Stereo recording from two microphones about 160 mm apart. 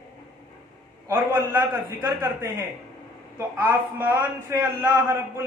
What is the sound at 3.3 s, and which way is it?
Speech, 15° right (ahead or behind).